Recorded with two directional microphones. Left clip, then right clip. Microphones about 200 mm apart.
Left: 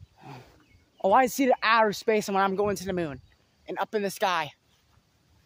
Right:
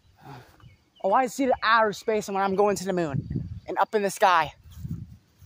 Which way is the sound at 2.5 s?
15° right (ahead or behind).